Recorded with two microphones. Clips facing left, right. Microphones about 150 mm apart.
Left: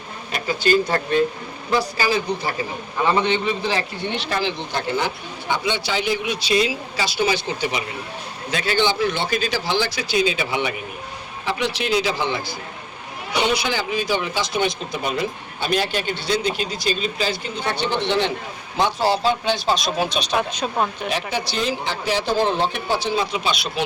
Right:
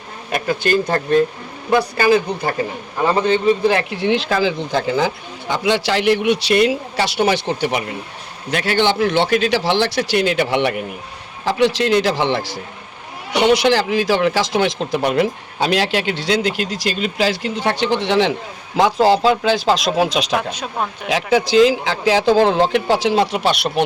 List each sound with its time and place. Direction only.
0.3 s speech: 50° right (ahead or behind)
3.1 s a man's voice: 40° right (ahead or behind)
3.7 s speech: 75° right (ahead or behind)
4.9 s speech: 90° right; by 10.8 s 75° right (ahead or behind)
11.4 s speech: 90° right
20.5 s speech: 5° right (ahead or behind)
21.1 s speech: 90° right; by 23.8 s 65° right (ahead or behind)